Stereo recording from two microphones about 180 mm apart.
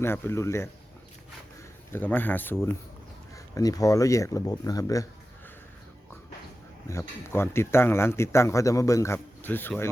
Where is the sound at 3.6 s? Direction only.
20° left (ahead or behind).